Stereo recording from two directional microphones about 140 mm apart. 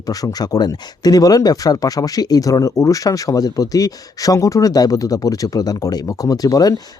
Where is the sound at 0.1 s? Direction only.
25° left (ahead or behind).